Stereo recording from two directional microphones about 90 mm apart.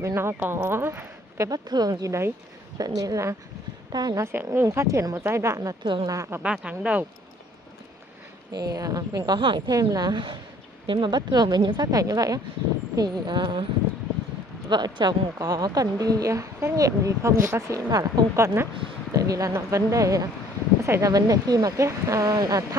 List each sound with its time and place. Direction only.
0.0 s speech: 30° right (ahead or behind)
1.5 s a woman's voice: 45° right (ahead or behind)
2.8 s a woman's voice: 45° right (ahead or behind)
4.2 s a woman's voice: 25° right (ahead or behind)
4.6 s a woman's voice: 35° right (ahead or behind)
6.4 s speech: 10° right (ahead or behind)
8.5 s a woman's voice: 45° right (ahead or behind)
9.7 s a woman's voice: 45° right (ahead or behind)
11.9 s a woman's voice: 40° right (ahead or behind); by 13.7 s 60° right (ahead or behind)
14.7 s a woman's voice: 55° right (ahead or behind); by 18.7 s 30° right (ahead or behind)
19.1 s a woman's voice: 40° right (ahead or behind)
21.1 s a woman's voice: 45° right (ahead or behind)